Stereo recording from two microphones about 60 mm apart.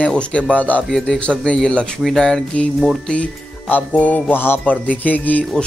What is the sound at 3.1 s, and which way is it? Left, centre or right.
Speech, left.